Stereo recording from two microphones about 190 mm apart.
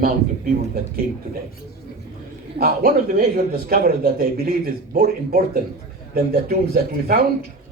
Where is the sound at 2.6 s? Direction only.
50° right (ahead or behind).